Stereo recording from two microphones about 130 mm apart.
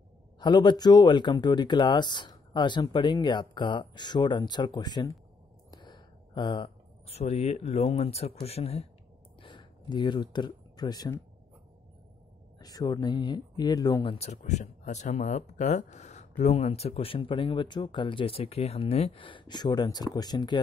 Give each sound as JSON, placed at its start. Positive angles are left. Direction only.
{"t": 0.4, "sound": "speech", "side_deg": 35}
{"t": 5.7, "sound": "a sound", "side_deg": 35}
{"t": 7.1, "sound": "speech", "side_deg": 55}
{"t": 9.4, "sound": "a sound", "side_deg": 40}
{"t": 12.5, "sound": "speech", "side_deg": 30}
{"t": 14.0, "sound": "speech", "side_deg": 55}